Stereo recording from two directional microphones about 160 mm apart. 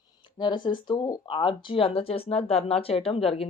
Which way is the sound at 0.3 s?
30° left (ahead or behind).